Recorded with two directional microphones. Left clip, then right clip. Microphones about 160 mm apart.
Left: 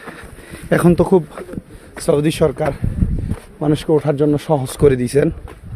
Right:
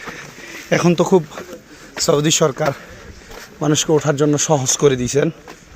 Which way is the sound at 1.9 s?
25° left (ahead or behind).